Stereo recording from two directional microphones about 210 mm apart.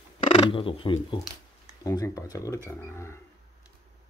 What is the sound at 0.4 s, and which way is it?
Speech, 25° left (ahead or behind).